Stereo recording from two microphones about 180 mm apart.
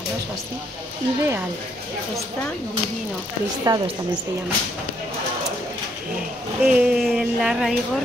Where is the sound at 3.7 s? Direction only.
20° right (ahead or behind).